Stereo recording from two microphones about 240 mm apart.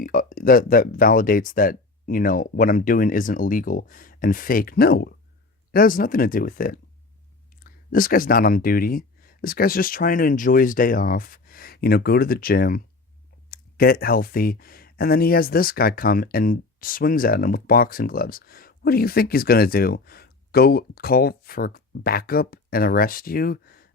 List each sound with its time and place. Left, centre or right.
0.0 s speech: left